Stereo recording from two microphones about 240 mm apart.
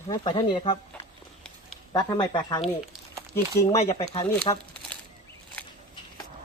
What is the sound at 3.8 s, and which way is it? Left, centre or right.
Speech, left.